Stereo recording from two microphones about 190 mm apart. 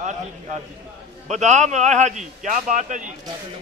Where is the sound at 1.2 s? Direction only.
40° right (ahead or behind).